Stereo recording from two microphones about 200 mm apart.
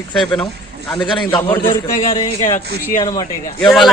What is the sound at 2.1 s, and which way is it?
Speech, 15° left (ahead or behind).